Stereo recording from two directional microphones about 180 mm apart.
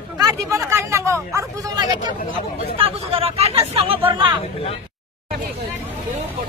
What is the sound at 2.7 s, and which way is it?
Speech, 35° right (ahead or behind).